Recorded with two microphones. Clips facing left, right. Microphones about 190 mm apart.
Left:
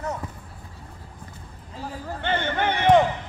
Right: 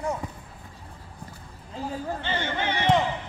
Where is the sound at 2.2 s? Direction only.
55° left (ahead or behind).